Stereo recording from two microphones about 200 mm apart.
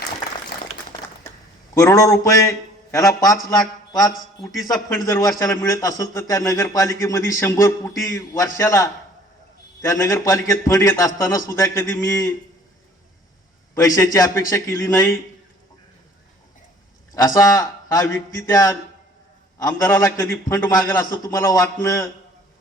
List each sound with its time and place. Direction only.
0.5 s a sound: 55° left (ahead or behind)
1.7 s a man's voice: 15° left (ahead or behind)
13.7 s a man's voice: 15° left (ahead or behind)
17.2 s a man's voice: 15° left (ahead or behind)